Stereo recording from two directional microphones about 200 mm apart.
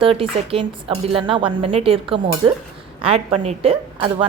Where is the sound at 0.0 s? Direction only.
30° right (ahead or behind).